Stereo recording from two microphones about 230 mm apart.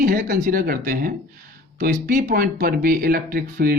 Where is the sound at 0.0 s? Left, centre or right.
Right.